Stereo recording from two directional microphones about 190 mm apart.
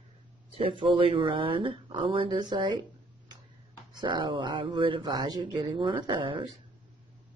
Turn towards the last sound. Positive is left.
turn(degrees=-25)  # may be behind; listen again after turning